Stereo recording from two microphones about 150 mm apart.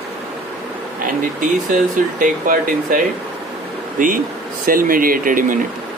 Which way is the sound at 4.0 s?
60° right (ahead or behind).